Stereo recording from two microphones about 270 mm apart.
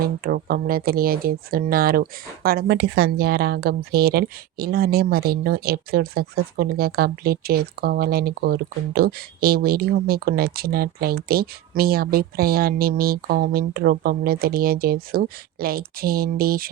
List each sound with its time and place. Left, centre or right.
0.2 s speech: right